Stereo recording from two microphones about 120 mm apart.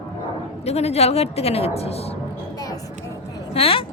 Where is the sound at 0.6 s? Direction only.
60° left (ahead or behind).